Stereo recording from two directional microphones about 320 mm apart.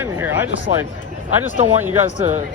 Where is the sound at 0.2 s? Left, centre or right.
Centre.